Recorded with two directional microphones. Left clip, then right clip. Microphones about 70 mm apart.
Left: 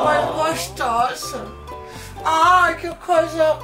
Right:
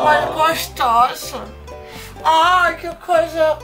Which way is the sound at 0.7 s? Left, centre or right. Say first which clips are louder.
Right 6 dB; right.